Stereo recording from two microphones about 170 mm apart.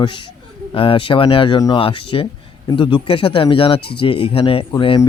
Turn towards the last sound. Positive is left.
turn(degrees=30)  # may be behind; listen again after turning